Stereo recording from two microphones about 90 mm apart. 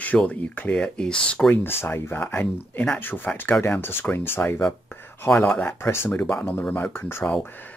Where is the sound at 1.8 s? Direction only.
25° left (ahead or behind).